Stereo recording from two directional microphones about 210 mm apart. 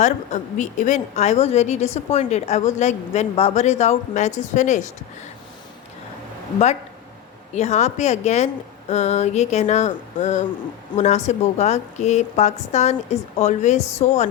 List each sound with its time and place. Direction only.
0.0 s a woman's voice: 35° left (ahead or behind)
7.5 s a woman's voice: 30° left (ahead or behind)